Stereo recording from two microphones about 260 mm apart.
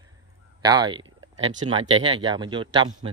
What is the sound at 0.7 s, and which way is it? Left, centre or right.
Speech, centre.